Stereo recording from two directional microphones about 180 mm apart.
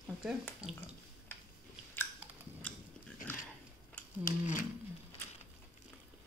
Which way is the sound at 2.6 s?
10° left (ahead or behind).